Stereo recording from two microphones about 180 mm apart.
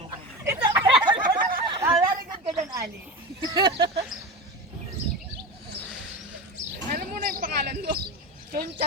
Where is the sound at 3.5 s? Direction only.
25° right (ahead or behind).